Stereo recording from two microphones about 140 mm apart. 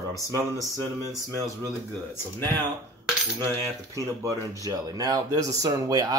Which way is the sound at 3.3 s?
25° right (ahead or behind).